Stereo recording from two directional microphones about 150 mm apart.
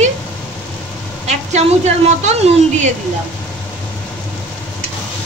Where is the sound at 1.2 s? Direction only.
50° right (ahead or behind).